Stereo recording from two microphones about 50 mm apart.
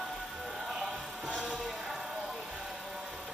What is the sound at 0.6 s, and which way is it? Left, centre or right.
Music, centre.